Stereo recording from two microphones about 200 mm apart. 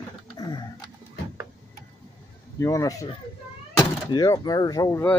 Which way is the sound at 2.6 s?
15° left (ahead or behind).